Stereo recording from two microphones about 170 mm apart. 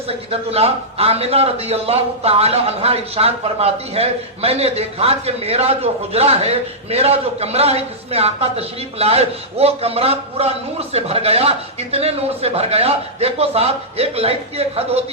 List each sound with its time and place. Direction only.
0.1 s a man's voice: 35° right (ahead or behind)